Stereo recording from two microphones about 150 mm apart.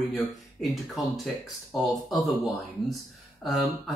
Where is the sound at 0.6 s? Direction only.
Centre (ahead or behind).